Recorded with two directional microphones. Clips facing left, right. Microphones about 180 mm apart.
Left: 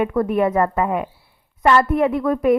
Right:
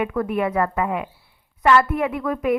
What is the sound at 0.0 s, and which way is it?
A woman's voice, 40° left (ahead or behind).